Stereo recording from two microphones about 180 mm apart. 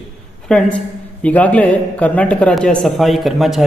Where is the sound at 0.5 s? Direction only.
5° left (ahead or behind).